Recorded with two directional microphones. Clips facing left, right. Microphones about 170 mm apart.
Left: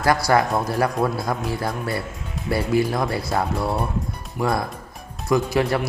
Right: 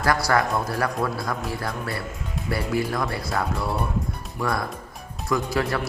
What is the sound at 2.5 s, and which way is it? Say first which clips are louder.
Speech: left 5 dB; 25° left (ahead or behind).